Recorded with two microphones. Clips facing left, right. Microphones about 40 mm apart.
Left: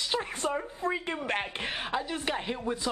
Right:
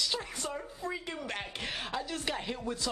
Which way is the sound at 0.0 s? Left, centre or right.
Left.